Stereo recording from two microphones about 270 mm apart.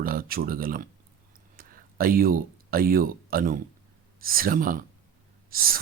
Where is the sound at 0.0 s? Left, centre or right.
Right.